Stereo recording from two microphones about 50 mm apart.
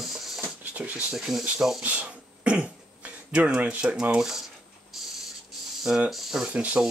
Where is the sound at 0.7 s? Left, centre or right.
Right.